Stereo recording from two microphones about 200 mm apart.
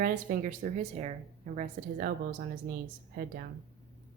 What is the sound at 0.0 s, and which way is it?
Speech, 40° right (ahead or behind).